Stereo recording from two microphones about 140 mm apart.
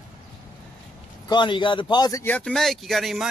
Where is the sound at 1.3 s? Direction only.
35° left (ahead or behind).